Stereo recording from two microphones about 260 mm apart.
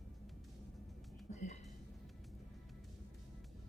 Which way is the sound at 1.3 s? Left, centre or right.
Left.